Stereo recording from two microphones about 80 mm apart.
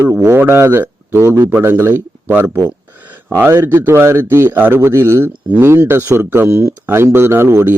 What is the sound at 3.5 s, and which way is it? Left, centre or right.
Speech, right.